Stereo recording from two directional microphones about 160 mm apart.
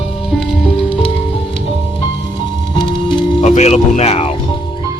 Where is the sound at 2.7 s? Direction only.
30° left (ahead or behind).